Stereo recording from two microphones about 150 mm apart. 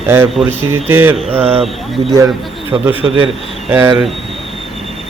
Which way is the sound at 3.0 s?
35° right (ahead or behind).